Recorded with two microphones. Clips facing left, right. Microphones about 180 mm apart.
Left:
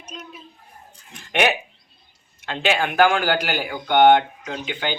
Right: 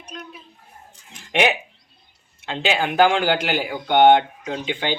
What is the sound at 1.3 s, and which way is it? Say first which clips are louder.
A man's voice: right 1 dB; 20° right (ahead or behind).